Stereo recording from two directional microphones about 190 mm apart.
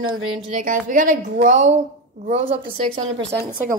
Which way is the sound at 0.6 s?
45° right (ahead or behind).